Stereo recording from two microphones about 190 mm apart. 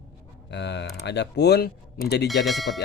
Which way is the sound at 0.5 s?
65° left (ahead or behind).